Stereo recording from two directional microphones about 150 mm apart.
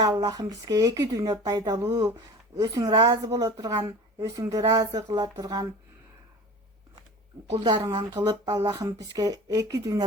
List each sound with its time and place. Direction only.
0.0 s speech: 25° right (ahead or behind)
7.5 s speech: 35° right (ahead or behind)